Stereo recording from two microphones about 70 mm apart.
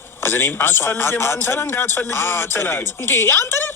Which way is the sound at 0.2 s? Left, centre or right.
Left.